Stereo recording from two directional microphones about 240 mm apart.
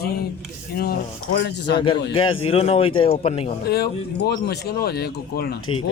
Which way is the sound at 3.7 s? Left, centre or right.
Left.